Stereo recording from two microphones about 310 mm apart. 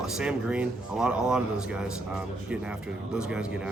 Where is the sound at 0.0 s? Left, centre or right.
Centre.